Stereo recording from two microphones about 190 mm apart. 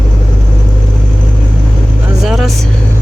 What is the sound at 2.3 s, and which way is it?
Speech, centre (ahead or behind).